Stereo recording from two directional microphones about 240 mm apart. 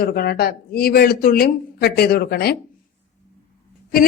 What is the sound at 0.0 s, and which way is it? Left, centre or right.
A woman's voice, left.